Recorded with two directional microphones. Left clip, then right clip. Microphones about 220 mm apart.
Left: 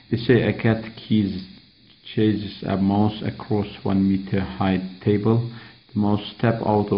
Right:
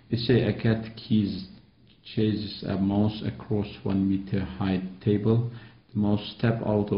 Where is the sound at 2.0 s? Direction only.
30° left (ahead or behind).